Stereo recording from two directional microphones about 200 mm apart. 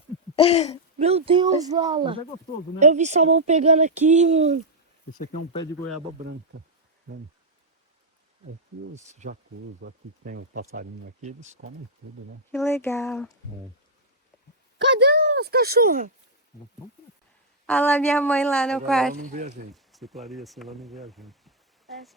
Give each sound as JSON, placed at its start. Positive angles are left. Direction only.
{"t": 0.3, "sound": "a sound", "side_deg": 30}
{"t": 0.9, "sound": "speech", "side_deg": -30}
{"t": 2.7, "sound": "speech", "side_deg": -35}
{"t": 9.0, "sound": "speech", "side_deg": -35}
{"t": 9.8, "sound": "speech", "side_deg": -50}
{"t": 12.5, "sound": "speech", "side_deg": 10}
{"t": 14.8, "sound": "a sound", "side_deg": -55}
{"t": 17.7, "sound": "speech", "side_deg": 5}